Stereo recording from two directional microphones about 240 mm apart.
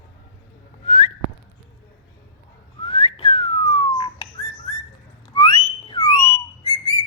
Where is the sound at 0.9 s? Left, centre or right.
Left.